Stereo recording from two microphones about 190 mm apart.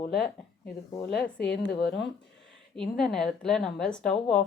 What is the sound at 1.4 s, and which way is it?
Speech, 65° left (ahead or behind).